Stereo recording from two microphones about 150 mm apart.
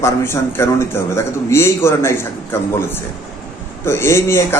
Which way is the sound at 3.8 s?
15° left (ahead or behind).